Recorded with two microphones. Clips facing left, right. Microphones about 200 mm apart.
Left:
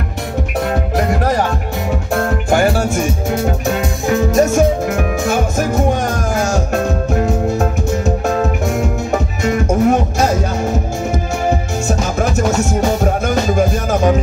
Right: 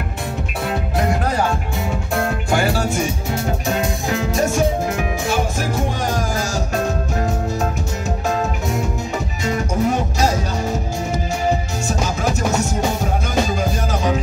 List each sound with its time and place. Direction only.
2.5 s music: 45° left (ahead or behind)
4.3 s music: 45° left (ahead or behind)
9.4 s music: 50° left (ahead or behind)
13.6 s music: 50° left (ahead or behind)